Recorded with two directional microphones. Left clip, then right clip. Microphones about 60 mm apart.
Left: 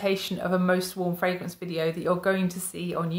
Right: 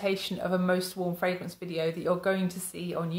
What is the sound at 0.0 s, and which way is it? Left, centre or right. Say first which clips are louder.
A woman's voice: left 3 dB; left.